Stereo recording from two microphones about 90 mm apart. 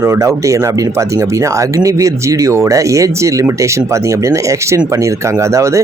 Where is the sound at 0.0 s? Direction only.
35° right (ahead or behind).